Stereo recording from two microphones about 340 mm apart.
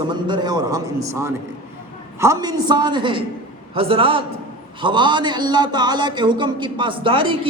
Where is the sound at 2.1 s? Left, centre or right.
Centre.